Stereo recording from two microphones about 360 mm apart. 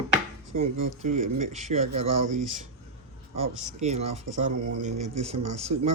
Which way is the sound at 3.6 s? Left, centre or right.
Centre.